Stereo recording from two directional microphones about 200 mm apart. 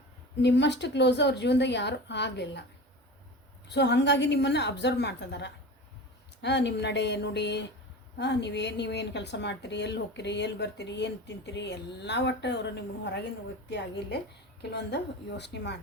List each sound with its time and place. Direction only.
0.4 s a woman's voice: 60° left (ahead or behind)
3.7 s a woman's voice: 60° left (ahead or behind)
14.6 s a woman's voice: 60° left (ahead or behind)